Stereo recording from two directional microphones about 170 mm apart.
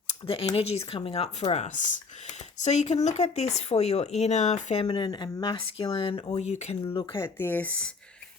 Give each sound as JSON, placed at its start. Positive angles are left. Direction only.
{"t": 0.3, "sound": "speech", "side_deg": 35}
{"t": 4.9, "sound": "speech", "side_deg": 30}
{"t": 7.0, "sound": "speech", "side_deg": 15}